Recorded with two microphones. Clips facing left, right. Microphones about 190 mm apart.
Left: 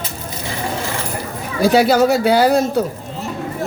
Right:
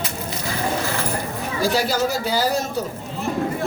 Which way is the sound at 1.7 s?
65° left (ahead or behind).